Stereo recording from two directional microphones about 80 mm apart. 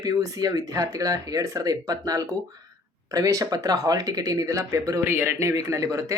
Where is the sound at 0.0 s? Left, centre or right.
Right.